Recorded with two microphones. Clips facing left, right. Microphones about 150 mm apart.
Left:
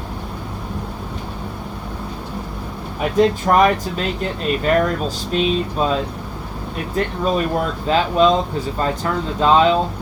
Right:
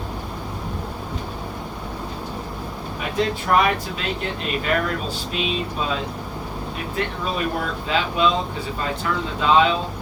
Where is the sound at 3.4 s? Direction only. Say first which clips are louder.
Left 4 dB; 40° left (ahead or behind).